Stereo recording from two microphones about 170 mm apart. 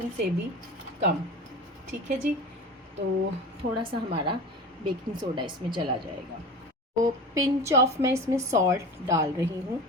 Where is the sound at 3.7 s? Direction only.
30° right (ahead or behind).